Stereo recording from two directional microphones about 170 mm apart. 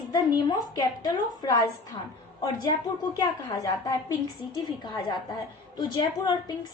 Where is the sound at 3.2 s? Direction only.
20° left (ahead or behind).